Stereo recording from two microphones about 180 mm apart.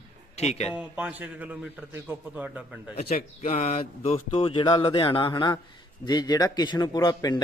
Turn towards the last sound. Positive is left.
turn(degrees=20)  # may be behind; listen again after turning